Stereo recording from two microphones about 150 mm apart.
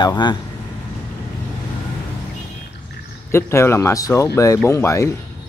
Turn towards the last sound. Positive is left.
turn(degrees=20)  # may be behind; listen again after turning